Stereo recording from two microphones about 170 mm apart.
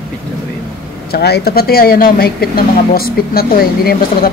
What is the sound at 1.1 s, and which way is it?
Speech, 70° left (ahead or behind).